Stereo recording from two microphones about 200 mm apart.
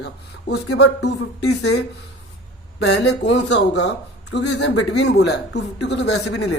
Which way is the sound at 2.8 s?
60° left (ahead or behind).